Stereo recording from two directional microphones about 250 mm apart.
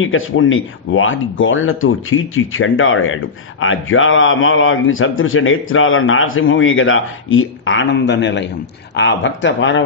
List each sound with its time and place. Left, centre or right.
0.0 s a man's voice: left